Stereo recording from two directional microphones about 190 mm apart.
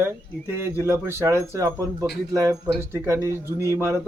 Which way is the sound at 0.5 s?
15° right (ahead or behind).